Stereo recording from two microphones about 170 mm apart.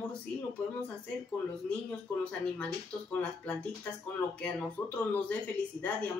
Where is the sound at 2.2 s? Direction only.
5° left (ahead or behind).